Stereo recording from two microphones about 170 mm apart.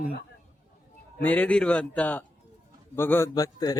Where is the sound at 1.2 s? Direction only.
10° left (ahead or behind).